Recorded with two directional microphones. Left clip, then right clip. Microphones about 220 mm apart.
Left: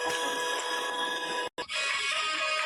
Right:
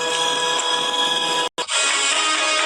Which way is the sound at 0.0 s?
40° right (ahead or behind).